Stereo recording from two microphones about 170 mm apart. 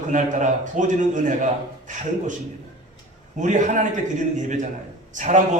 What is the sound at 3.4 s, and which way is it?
Speech, 50° right (ahead or behind).